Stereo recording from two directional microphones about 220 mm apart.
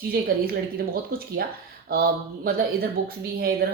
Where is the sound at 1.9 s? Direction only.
45° right (ahead or behind).